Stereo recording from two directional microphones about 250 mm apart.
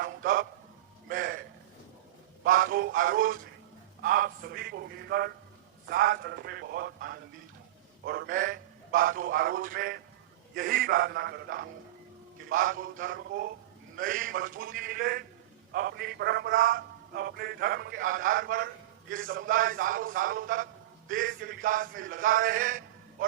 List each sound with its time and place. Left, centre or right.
0.0 s a sound: right
2.4 s music: right
4.0 s a man's voice: right